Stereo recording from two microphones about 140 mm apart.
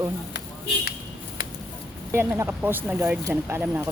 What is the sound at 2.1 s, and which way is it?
Speech, 20° right (ahead or behind).